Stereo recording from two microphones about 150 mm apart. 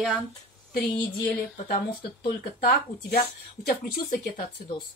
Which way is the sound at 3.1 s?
80° left.